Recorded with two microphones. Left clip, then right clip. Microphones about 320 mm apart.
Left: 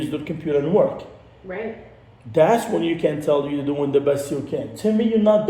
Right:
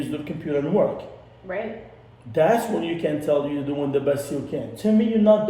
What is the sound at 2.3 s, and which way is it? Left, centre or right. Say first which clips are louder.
A man's voice: left 3 dB; centre.